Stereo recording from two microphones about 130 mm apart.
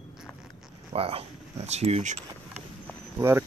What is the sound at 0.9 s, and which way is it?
Speech, 50° right (ahead or behind).